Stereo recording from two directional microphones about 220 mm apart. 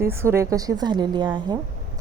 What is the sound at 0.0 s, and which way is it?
Speech, 10° right (ahead or behind).